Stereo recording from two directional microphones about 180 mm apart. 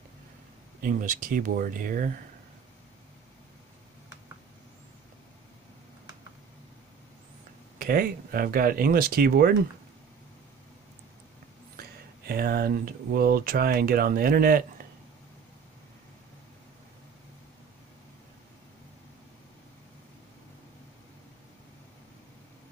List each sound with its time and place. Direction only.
0.7 s speech: 50° right (ahead or behind)
7.8 s speech: 50° right (ahead or behind)
12.3 s speech: 55° right (ahead or behind)